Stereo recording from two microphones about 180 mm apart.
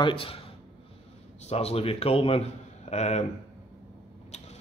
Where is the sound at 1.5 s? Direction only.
35° left (ahead or behind).